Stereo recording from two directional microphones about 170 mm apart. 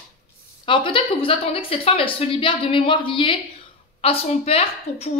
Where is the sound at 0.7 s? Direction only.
30° left (ahead or behind).